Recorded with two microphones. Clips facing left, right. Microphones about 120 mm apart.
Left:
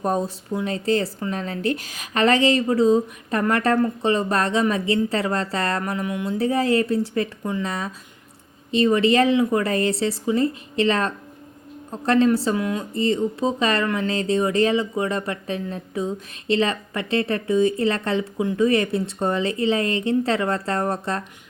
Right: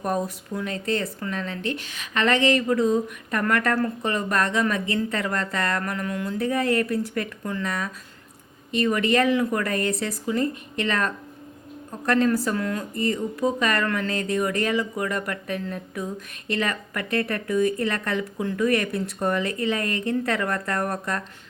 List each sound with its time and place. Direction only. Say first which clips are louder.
0.0 s speech: left 3 dB; 30° left (ahead or behind)
6.0 s a sound: left 2 dB; 15° left (ahead or behind)
6.2 s speech: left 3 dB; 30° left (ahead or behind)
8.7 s speech: left 4 dB; 30° left (ahead or behind)
12.5 s a sound: left 3 dB; 15° left (ahead or behind)
12.9 s speech: left 4 dB; 25° left (ahead or behind)